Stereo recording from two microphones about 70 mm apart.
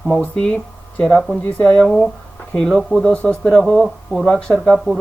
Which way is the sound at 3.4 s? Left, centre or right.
Centre.